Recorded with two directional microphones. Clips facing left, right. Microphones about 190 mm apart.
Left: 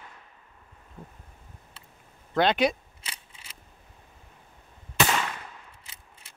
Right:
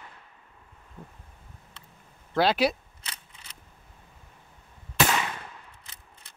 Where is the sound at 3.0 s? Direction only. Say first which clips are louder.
Even; 10° left (ahead or behind).